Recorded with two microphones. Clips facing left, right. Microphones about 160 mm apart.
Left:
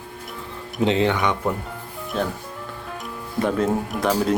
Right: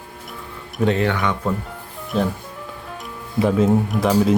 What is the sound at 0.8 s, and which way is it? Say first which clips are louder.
Speech: even; 20° left (ahead or behind).